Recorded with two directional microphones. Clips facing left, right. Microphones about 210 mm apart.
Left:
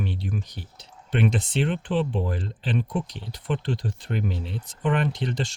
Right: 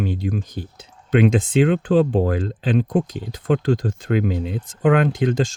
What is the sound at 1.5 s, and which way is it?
Speech, 90° right.